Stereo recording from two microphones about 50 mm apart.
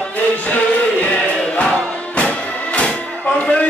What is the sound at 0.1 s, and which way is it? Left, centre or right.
Music, left.